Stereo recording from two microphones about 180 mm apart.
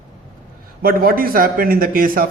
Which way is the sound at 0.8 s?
55° right (ahead or behind).